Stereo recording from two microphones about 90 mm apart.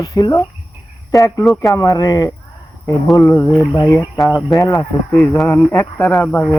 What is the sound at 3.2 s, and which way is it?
A man's voice, 35° left (ahead or behind).